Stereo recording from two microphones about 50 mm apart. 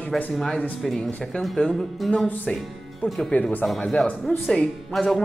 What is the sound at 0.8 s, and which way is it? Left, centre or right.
Speech, centre.